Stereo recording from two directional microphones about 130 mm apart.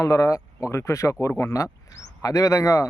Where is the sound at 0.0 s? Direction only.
25° left (ahead or behind).